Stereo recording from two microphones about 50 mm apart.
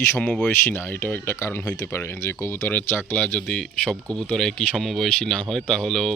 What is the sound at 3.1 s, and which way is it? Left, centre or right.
Speech, left.